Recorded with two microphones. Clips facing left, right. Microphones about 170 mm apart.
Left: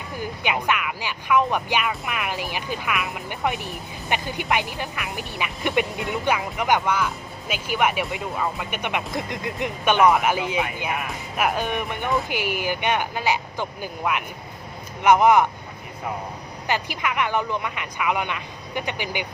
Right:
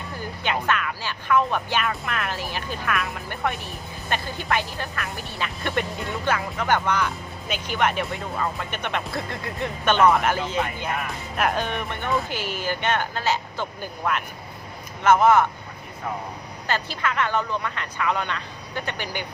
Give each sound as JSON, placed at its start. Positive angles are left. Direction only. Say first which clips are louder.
{"t": 0.4, "sound": "speech", "louder": "even", "side_deg": 15}
{"t": 16.6, "sound": "speech", "louder": "left 1 dB", "side_deg": 15}